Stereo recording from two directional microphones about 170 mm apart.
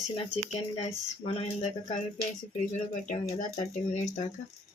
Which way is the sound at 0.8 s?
35° left (ahead or behind).